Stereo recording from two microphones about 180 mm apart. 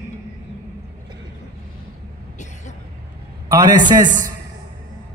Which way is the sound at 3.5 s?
20° right (ahead or behind).